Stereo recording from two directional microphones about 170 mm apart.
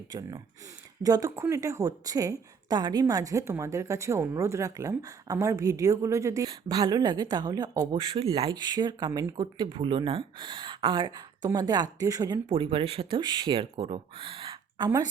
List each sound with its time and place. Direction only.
0.1 s a woman's voice: 20° right (ahead or behind)